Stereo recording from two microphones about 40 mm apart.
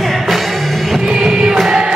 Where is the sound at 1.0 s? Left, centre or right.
Centre.